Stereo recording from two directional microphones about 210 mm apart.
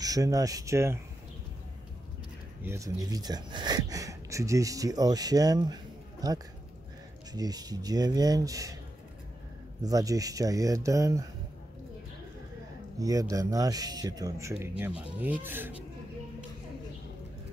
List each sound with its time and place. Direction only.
0.0 s speech: 15° right (ahead or behind)
2.6 s speech: 15° right (ahead or behind)
7.3 s speech: 20° right (ahead or behind)
9.8 s speech: 15° right (ahead or behind)
13.0 s speech: 15° right (ahead or behind)